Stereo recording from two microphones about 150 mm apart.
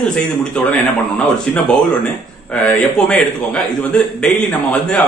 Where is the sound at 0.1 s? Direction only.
5° left (ahead or behind).